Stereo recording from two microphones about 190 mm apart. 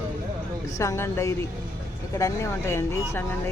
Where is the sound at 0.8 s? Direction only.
15° left (ahead or behind).